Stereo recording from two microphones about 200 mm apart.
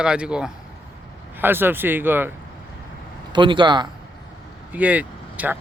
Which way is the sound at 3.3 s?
25° right (ahead or behind).